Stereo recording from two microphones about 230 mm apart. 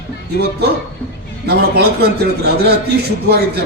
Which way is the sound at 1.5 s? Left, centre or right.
Right.